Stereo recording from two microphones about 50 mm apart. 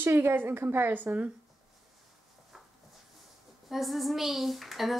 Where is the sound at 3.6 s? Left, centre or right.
Centre.